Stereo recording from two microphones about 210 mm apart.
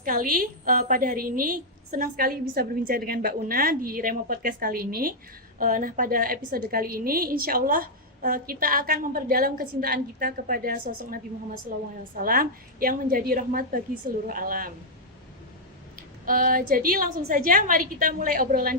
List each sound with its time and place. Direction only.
0.0 s a woman's voice: 40° right (ahead or behind)
16.2 s a woman's voice: 40° right (ahead or behind)